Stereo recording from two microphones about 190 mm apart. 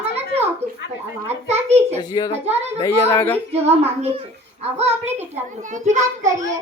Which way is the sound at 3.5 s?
30° right (ahead or behind).